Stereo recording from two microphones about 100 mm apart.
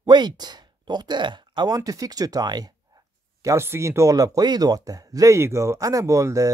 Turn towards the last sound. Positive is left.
turn(degrees=-35)  # may be behind; listen again after turning